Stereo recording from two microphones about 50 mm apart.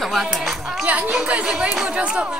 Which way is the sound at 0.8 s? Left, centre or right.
Right.